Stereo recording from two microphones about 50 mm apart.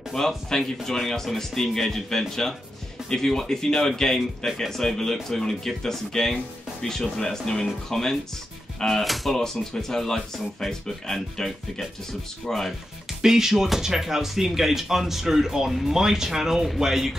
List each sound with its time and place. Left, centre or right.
0.1 s speech: centre
0.5 s speech: centre
13.2 s speech: centre